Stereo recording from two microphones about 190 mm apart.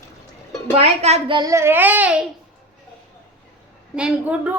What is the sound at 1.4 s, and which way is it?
Child singing, 15° right (ahead or behind).